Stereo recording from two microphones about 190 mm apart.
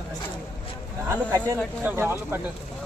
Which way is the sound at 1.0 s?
15° right (ahead or behind).